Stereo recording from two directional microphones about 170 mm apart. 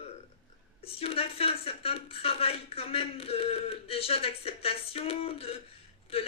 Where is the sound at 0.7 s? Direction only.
35° left (ahead or behind).